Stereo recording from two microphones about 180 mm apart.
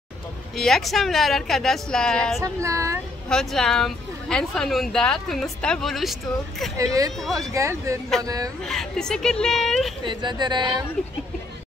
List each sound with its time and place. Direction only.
0.6 s a woman's voice: centre (ahead or behind)
2.4 s speech: 15° right (ahead or behind)
3.3 s a woman's voice: 5° left (ahead or behind)
6.8 s speech: 20° right (ahead or behind)
8.6 s a woman's voice: 5° left (ahead or behind)
10.0 s speech: 25° right (ahead or behind)